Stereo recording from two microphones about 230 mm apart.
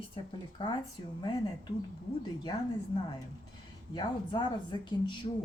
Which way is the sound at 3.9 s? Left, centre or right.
Left.